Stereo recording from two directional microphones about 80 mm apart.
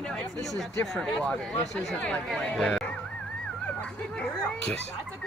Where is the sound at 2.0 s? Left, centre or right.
Centre.